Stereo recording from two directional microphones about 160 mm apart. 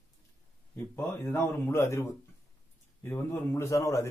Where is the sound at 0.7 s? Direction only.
15° left (ahead or behind).